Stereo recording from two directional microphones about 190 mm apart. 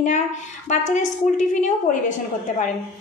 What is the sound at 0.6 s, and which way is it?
A woman's voice, 40° left (ahead or behind).